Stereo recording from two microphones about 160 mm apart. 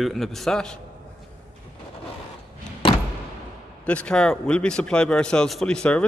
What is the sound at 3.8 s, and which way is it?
Speech, 5° left (ahead or behind).